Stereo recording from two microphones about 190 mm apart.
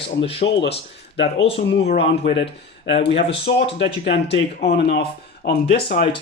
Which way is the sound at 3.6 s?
65° left (ahead or behind).